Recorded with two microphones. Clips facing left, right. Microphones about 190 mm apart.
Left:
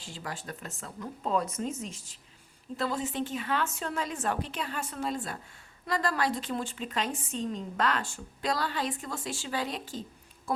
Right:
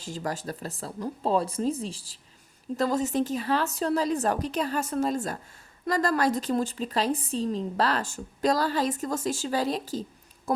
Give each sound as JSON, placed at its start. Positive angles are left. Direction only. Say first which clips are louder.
{"t": 0.0, "sound": "a woman's voice", "louder": "right 8 dB", "side_deg": -40}